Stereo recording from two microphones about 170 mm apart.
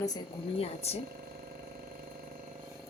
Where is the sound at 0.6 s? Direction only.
40° left (ahead or behind).